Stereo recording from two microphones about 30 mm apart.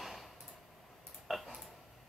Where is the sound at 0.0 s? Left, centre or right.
Centre.